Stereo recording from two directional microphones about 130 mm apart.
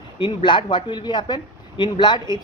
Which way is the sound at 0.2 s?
40° left (ahead or behind).